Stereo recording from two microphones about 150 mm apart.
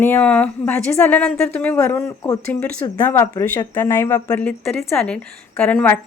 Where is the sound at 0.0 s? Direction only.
10° left (ahead or behind).